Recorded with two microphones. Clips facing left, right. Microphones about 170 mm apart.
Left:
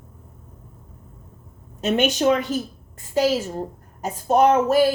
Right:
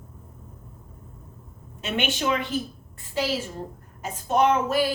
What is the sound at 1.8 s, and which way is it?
A woman's voice, 40° left (ahead or behind).